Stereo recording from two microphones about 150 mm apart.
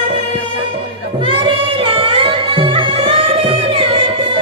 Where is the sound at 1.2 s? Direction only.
35° right (ahead or behind).